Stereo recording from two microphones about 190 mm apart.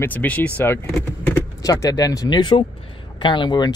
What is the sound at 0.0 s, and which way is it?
Speech, 10° left (ahead or behind).